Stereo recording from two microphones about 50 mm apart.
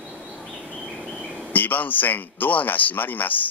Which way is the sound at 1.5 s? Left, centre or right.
Left.